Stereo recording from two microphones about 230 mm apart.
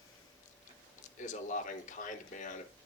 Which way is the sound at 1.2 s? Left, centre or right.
Left.